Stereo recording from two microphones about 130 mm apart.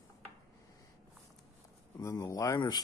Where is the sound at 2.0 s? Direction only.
25° left (ahead or behind).